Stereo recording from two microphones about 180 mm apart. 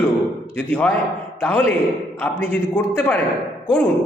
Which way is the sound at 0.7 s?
5° left (ahead or behind).